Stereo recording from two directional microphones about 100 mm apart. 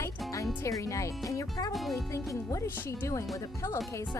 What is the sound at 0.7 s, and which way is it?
Speech, 30° left (ahead or behind).